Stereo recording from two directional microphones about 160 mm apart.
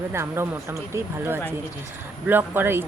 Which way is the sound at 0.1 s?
15° right (ahead or behind).